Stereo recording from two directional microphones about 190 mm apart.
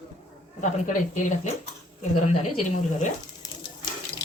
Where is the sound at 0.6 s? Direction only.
40° left (ahead or behind).